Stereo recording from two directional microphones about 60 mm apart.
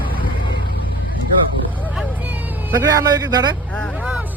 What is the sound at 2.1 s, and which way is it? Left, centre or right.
Vehicle, right.